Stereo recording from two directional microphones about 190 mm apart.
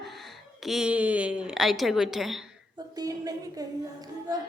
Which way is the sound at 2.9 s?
20° right (ahead or behind).